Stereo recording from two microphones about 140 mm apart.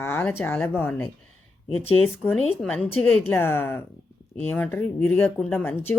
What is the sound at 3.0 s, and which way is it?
A woman's voice, 15° left (ahead or behind).